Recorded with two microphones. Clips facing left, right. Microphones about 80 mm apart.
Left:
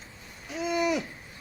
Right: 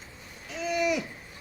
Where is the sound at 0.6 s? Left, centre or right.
Left.